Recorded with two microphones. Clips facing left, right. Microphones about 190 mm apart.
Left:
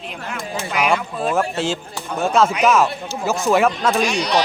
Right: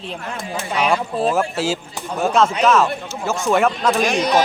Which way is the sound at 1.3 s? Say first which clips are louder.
Even; 5° right (ahead or behind).